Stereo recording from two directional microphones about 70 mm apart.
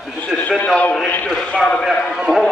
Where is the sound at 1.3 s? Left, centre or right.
Centre.